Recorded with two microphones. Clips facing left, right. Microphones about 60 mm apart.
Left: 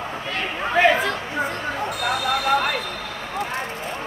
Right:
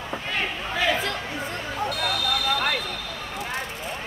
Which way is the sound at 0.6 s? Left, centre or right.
Left.